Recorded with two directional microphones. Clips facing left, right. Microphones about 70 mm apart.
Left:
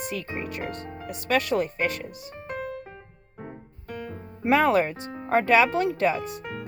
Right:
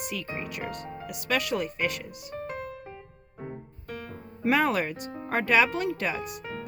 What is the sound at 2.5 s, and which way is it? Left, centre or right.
Music, left.